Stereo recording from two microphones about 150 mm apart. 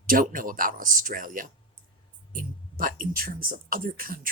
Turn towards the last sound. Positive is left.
turn(degrees=-70)  # may be behind; listen again after turning